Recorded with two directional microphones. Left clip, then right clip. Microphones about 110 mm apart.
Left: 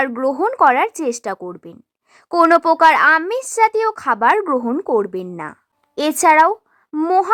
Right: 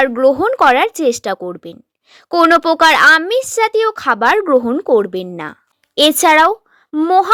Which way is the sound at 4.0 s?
40° right (ahead or behind).